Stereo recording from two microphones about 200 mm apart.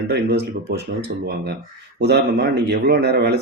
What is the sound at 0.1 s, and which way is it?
Speech, 55° right (ahead or behind).